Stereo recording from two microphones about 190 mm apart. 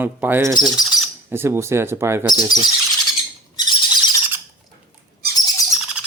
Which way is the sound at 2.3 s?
20° left (ahead or behind).